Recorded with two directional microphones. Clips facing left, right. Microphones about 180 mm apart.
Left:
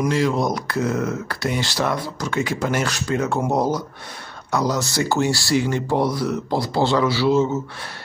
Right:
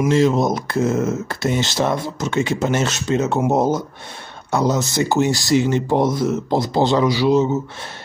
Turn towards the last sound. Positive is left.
turn(degrees=-20)  # may be behind; listen again after turning